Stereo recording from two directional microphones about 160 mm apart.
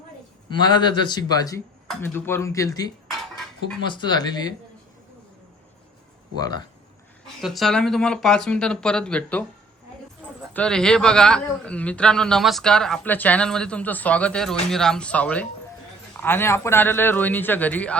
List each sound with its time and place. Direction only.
0.5 s speech: 30° left (ahead or behind)
7.4 s speech: centre (ahead or behind)
10.5 s a man's voice: 5° left (ahead or behind)